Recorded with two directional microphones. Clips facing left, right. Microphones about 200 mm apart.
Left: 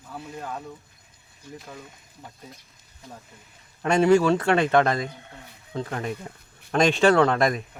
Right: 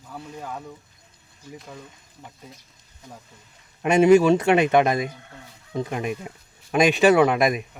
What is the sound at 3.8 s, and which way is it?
Speech, 20° right (ahead or behind).